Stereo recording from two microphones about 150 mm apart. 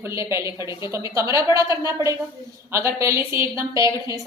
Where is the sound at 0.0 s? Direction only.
20° right (ahead or behind).